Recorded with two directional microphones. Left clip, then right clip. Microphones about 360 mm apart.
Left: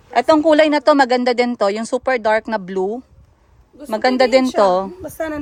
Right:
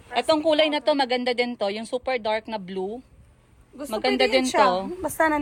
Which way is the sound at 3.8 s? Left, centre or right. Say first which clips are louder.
Left 8 dB; left.